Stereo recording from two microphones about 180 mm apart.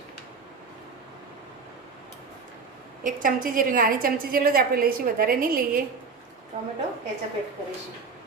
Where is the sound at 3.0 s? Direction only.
50° right (ahead or behind).